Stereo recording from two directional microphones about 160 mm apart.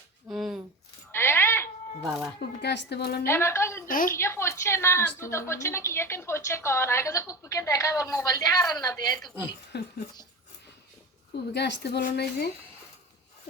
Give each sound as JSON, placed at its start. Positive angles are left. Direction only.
{"t": 0.3, "sound": "a sound", "side_deg": 0}
{"t": 1.1, "sound": "coin", "side_deg": 15}
{"t": 2.0, "sound": "speech", "side_deg": -5}
{"t": 2.4, "sound": "speech", "side_deg": 90}
{"t": 3.2, "sound": "a woman's voice", "side_deg": 15}
{"t": 3.8, "sound": "a woman's voice", "side_deg": 60}
{"t": 4.2, "sound": "a woman's voice", "side_deg": 15}
{"t": 9.1, "sound": "speech", "side_deg": 0}
{"t": 9.7, "sound": "speech", "side_deg": 90}
{"t": 11.5, "sound": "speech", "side_deg": 90}